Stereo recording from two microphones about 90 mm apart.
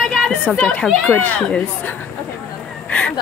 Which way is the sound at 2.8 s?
15° left (ahead or behind).